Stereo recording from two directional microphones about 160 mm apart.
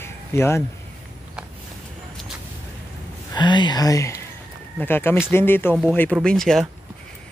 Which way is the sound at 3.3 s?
30° left (ahead or behind).